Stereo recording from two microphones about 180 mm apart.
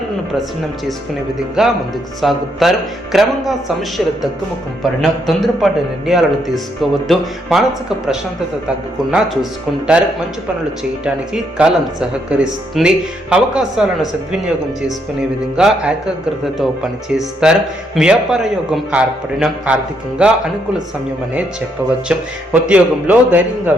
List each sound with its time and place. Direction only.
1.6 s speech: 5° right (ahead or behind)
11.5 s speech: 5° right (ahead or behind)
22.1 s a man's voice: 5° right (ahead or behind)